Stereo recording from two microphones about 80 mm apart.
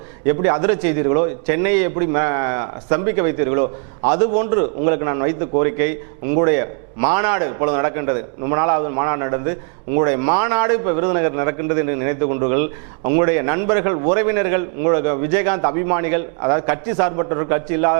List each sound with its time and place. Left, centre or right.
0.3 s a man's voice: right